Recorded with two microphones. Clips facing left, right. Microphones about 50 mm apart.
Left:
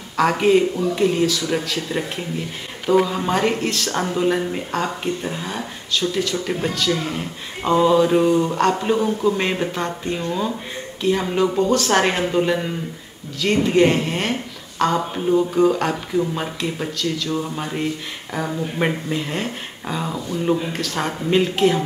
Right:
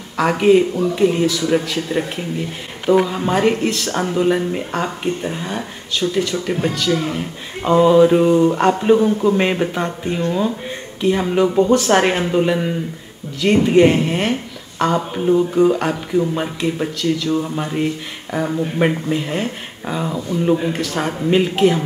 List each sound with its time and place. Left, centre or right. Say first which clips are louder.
0.2 s speech: right 2 dB; centre